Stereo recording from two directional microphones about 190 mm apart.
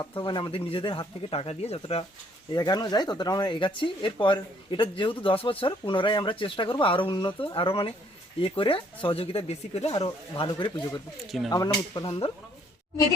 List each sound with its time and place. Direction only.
0.0 s speech: 25° left (ahead or behind)
2.5 s speech: 20° left (ahead or behind)
11.3 s speech: centre (ahead or behind)
11.5 s speech: 20° left (ahead or behind)
12.0 s speech: 30° left (ahead or behind)